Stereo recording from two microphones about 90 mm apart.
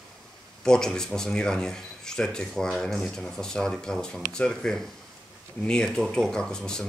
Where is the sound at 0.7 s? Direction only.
5° left (ahead or behind).